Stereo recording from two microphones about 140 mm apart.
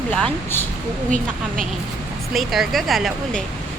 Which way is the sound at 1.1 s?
70° right (ahead or behind).